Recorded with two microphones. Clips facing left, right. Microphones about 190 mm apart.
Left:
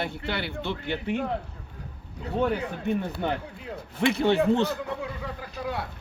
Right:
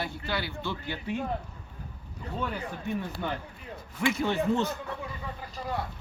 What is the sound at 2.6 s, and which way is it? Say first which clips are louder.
Speech: left 5 dB; 65° left (ahead or behind).